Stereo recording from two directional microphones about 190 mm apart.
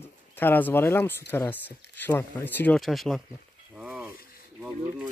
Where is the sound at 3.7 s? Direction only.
5° right (ahead or behind).